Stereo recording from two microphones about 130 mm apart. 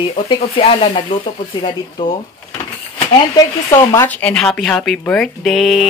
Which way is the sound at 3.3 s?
35° left (ahead or behind).